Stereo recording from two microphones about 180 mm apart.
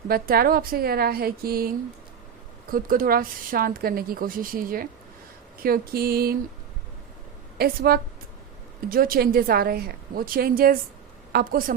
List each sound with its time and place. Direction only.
0.1 s a woman's voice: 55° right (ahead or behind)
7.6 s a woman's voice: 55° right (ahead or behind)